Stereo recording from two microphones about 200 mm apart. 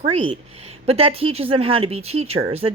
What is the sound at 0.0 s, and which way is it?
Speech, 30° right (ahead or behind).